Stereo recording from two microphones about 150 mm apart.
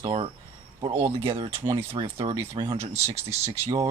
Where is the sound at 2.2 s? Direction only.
30° right (ahead or behind).